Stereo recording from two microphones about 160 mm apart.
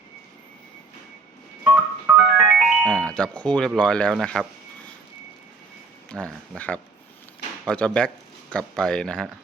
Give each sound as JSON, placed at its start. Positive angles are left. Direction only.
{"t": 1.6, "sound": "music", "side_deg": -10}
{"t": 3.1, "sound": "speech", "side_deg": 5}
{"t": 6.1, "sound": "speech", "side_deg": 5}